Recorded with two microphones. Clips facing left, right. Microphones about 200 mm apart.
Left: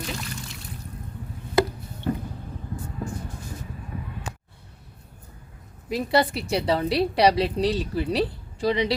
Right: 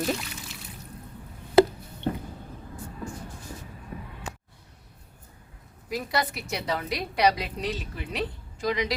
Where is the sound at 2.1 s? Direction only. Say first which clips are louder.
Left 2 dB; 35° right (ahead or behind).